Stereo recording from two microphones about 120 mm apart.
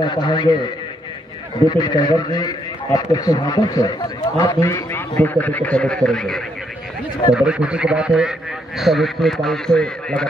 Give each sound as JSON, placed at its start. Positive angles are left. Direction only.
{"t": 0.0, "sound": "a man's voice", "side_deg": 40}
{"t": 1.7, "sound": "a man's voice", "side_deg": 35}
{"t": 7.3, "sound": "a man's voice", "side_deg": -10}